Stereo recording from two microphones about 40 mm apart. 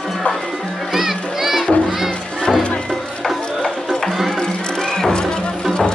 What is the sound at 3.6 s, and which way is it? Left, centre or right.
Music, centre.